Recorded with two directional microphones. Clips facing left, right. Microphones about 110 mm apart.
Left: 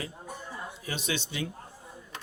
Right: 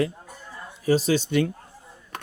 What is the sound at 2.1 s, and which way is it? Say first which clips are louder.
Mechanisms: right 7 dB; 60° right (ahead or behind).